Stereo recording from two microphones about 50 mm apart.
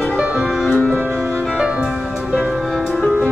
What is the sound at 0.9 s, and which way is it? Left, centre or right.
Music, right.